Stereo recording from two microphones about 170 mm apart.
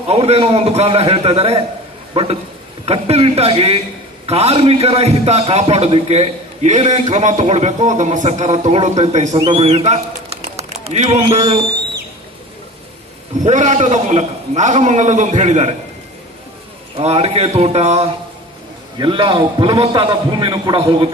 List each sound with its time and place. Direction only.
0.1 s a man's voice: 35° right (ahead or behind)
13.4 s a man's voice: 45° right (ahead or behind)
17.0 s a man's voice: 35° right (ahead or behind)